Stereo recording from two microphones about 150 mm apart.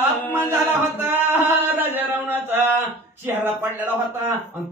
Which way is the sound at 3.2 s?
15° right (ahead or behind).